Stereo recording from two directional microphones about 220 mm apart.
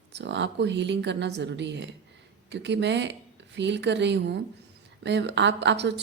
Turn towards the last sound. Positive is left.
turn(degrees=-50)  # may be behind; listen again after turning